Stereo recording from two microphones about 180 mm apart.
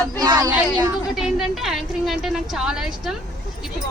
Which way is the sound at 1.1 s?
Centre (ahead or behind).